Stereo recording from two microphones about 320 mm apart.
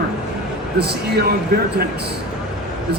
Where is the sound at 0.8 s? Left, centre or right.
Right.